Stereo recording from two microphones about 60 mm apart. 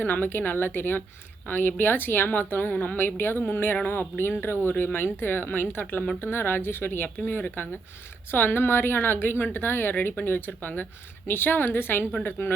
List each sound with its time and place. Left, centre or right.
0.0 s a woman's voice: left